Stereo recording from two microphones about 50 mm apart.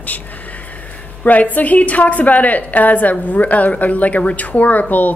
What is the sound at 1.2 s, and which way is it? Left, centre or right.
A woman's voice, left.